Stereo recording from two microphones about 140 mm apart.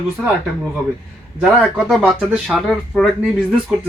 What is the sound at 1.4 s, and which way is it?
Speech, 5° right (ahead or behind).